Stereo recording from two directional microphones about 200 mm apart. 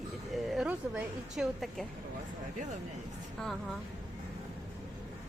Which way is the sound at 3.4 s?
5° left (ahead or behind).